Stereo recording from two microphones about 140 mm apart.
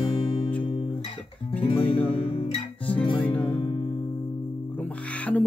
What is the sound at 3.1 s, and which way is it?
Speech, 10° left (ahead or behind).